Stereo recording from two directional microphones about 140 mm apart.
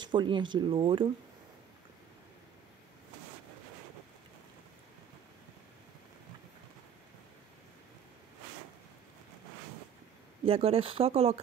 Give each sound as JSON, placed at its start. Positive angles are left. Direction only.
{"t": 0.0, "sound": "speech", "side_deg": -35}
{"t": 10.4, "sound": "speech", "side_deg": -45}